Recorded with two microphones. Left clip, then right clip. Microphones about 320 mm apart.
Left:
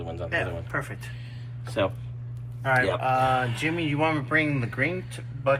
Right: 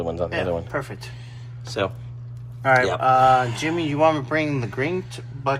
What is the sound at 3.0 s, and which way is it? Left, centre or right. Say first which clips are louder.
Speech: right 7 dB; right.